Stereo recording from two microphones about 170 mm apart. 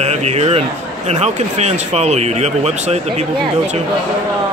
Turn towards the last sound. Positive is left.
turn(degrees=-40)  # may be behind; listen again after turning